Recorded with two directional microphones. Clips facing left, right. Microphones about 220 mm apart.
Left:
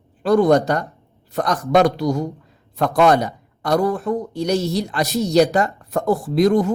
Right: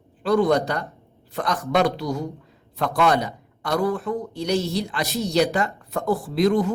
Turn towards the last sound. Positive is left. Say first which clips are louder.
# left 4 dB
turn(degrees=45)  # may be behind; listen again after turning